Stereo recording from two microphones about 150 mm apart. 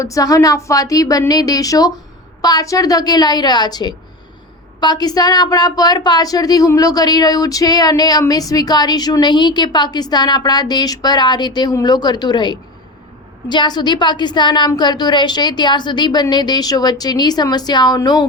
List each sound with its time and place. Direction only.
0.0 s a woman's voice: 20° left (ahead or behind)